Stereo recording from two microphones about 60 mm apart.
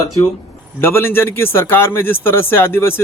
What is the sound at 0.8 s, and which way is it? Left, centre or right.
Speech, left.